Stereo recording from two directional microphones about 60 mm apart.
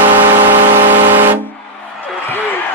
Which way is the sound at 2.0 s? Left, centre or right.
Left.